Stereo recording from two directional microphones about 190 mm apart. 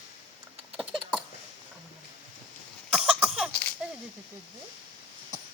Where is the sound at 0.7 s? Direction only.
5° right (ahead or behind).